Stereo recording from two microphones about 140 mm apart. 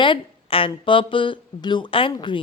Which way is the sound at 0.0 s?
40° left (ahead or behind).